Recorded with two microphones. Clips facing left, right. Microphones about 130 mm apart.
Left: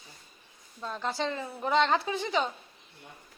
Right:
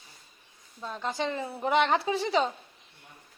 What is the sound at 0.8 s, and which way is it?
Speech, 5° right (ahead or behind).